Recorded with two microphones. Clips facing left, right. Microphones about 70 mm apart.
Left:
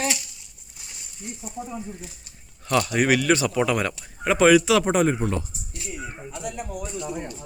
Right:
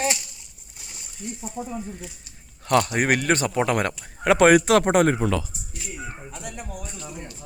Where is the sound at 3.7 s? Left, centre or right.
Right.